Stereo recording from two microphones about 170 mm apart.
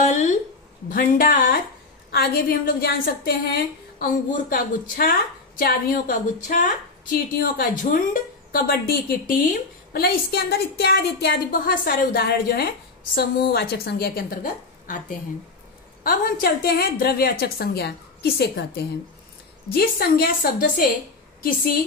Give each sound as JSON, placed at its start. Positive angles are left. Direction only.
{"t": 0.0, "sound": "a sound", "side_deg": 45}
{"t": 0.8, "sound": "a woman's voice", "side_deg": 55}
{"t": 2.0, "sound": "a woman's voice", "side_deg": 70}
{"t": 9.3, "sound": "a woman's voice", "side_deg": 55}